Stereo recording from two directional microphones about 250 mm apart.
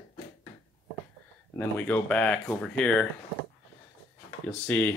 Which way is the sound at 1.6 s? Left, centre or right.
Centre.